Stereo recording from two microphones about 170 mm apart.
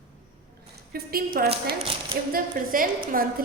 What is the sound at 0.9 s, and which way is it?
A woman's voice, 65° right (ahead or behind).